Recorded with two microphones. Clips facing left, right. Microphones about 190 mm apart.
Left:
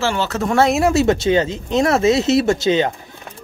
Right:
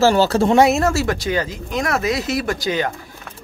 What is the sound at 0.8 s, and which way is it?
Speech, 20° left (ahead or behind).